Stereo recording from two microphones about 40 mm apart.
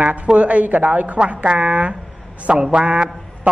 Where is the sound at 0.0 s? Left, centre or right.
Right.